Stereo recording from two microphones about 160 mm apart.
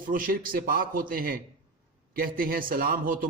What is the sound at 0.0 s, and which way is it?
A man's voice, 60° right (ahead or behind).